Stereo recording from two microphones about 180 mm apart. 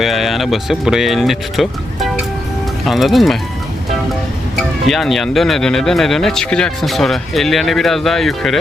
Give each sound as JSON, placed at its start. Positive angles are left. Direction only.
{"t": 0.0, "sound": "speech", "side_deg": 0}
{"t": 4.9, "sound": "speech", "side_deg": 0}